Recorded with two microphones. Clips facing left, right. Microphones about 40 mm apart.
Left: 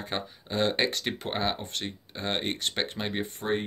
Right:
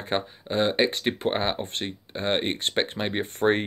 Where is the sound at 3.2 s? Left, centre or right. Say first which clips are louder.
Right 7 dB; right.